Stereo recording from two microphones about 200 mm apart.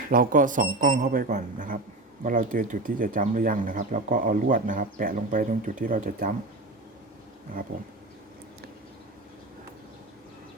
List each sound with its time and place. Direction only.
0.1 s speech: 45° right (ahead or behind)